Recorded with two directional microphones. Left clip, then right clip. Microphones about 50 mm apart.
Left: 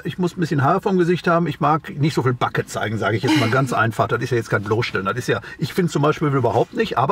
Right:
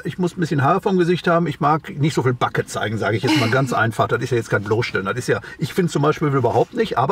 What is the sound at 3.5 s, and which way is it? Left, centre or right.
Speech, centre.